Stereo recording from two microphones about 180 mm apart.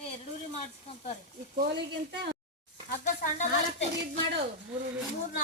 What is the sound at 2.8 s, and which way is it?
Speech, 50° left (ahead or behind).